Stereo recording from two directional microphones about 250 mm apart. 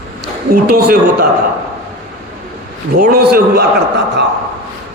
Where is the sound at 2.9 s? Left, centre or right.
Right.